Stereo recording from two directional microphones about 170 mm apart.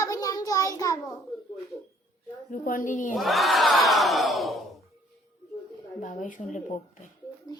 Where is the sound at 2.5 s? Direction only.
50° left (ahead or behind).